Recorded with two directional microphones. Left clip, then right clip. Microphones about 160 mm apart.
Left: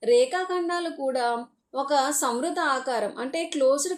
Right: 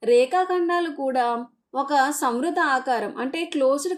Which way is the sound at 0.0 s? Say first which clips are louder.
Right 3 dB; 35° right (ahead or behind).